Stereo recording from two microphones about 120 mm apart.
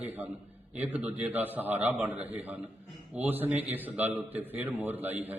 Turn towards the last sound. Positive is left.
turn(degrees=-15)  # may be behind; listen again after turning